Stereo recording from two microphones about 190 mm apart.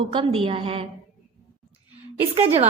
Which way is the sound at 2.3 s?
30° right (ahead or behind).